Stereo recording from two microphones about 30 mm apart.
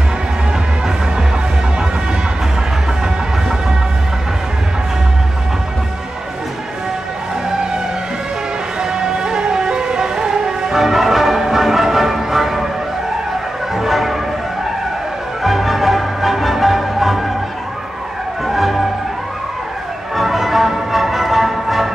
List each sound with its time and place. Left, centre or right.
8.8 s music: centre
10.7 s music: centre
13.7 s music: centre
15.4 s music: centre
18.4 s music: centre
20.2 s music: centre